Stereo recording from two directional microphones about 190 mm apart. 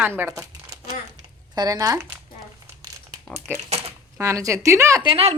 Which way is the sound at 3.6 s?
35° right (ahead or behind).